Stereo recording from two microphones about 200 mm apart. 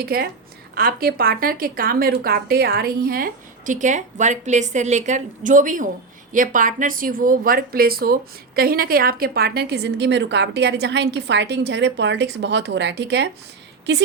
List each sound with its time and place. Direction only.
0.0 s a woman's voice: 50° right (ahead or behind)